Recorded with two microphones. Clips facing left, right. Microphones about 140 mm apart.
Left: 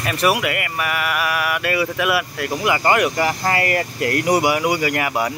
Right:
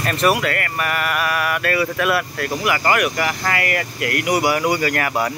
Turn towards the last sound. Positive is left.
turn(degrees=15)  # may be behind; listen again after turning